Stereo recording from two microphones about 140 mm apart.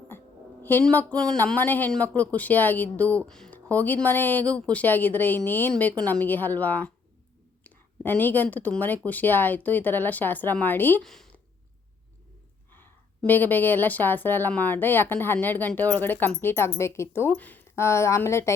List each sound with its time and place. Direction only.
0.6 s a woman's voice: 15° left (ahead or behind)
11.0 s speech: 5° left (ahead or behind)
12.7 s a woman's voice: 15° left (ahead or behind)